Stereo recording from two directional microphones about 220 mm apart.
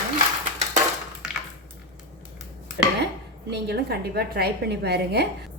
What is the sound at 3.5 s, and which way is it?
A woman's voice, 45° right (ahead or behind).